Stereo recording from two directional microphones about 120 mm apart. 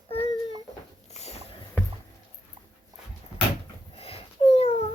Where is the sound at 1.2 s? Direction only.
65° left (ahead or behind).